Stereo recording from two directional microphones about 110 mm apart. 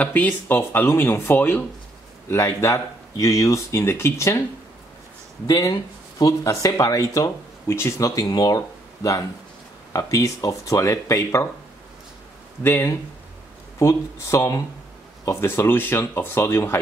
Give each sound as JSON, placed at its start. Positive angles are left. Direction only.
{"t": 0.0, "sound": "speech", "side_deg": 15}
{"t": 5.5, "sound": "speech", "side_deg": 35}
{"t": 12.6, "sound": "speech", "side_deg": 20}